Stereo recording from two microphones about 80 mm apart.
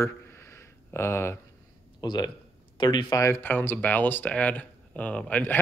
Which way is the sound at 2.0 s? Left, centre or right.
Left.